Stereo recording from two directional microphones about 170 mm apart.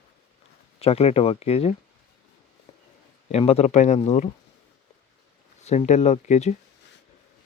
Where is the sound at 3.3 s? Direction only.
35° left (ahead or behind).